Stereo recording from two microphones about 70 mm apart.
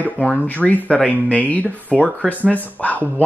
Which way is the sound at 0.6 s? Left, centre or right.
Centre.